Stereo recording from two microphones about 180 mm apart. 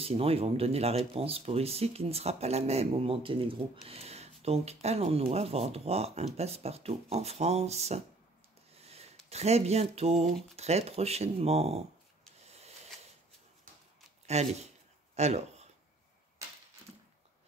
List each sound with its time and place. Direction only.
0.0 s speech: 35° right (ahead or behind)
12.4 s a sound: 35° right (ahead or behind)
14.2 s speech: 40° right (ahead or behind)